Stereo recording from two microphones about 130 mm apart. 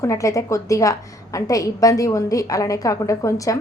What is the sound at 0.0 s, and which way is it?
A woman's voice, 25° left (ahead or behind).